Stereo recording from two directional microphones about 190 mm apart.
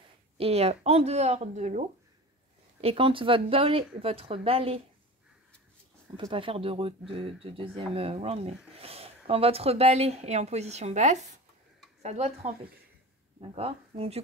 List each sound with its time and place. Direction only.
0.4 s speech: 35° right (ahead or behind)
6.1 s speech: 25° right (ahead or behind)